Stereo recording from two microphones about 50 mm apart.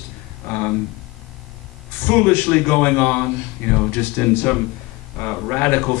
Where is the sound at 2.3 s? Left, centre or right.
Left.